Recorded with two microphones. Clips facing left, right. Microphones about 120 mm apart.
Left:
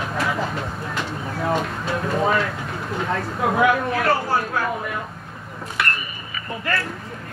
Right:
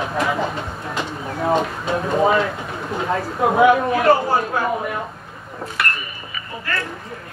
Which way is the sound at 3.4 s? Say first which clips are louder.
Right 5 dB; 20° right (ahead or behind).